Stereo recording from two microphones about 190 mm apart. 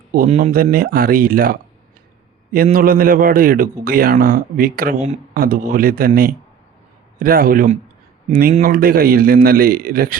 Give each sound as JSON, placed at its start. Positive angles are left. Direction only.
{"t": 0.3, "sound": "a man's voice", "side_deg": -50}
{"t": 2.7, "sound": "a man's voice", "side_deg": -50}